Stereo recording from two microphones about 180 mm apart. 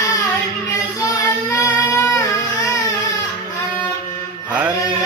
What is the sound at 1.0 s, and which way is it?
Child singing, 20° left (ahead or behind).